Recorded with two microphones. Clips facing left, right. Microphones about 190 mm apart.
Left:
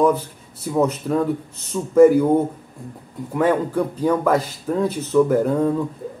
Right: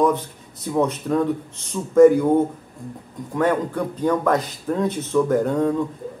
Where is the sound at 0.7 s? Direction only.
5° left (ahead or behind).